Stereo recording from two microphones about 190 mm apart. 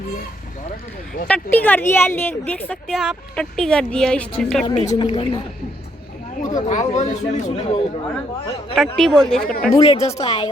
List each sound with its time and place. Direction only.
1.3 s speech: 10° left (ahead or behind)
4.9 s speech: 25° left (ahead or behind)
6.3 s speech: 40° left (ahead or behind)
9.0 s speech: centre (ahead or behind)
9.8 s speech: 35° left (ahead or behind)